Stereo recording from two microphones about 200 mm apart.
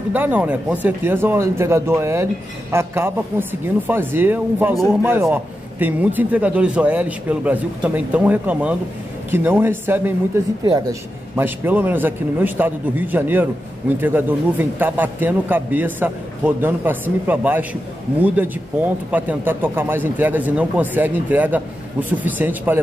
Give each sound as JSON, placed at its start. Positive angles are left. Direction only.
{"t": 0.1, "sound": "speech", "side_deg": -10}
{"t": 10.6, "sound": "speech", "side_deg": -20}
{"t": 11.3, "sound": "speech", "side_deg": -10}